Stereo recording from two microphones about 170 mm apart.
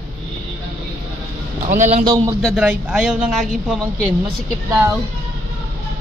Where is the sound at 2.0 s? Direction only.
25° right (ahead or behind).